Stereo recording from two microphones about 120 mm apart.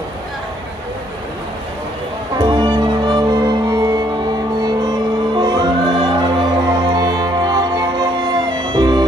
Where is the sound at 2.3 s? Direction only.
35° right (ahead or behind).